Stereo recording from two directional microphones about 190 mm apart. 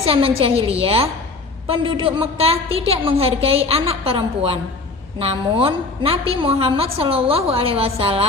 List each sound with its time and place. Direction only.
0.0 s a woman's voice: 30° right (ahead or behind)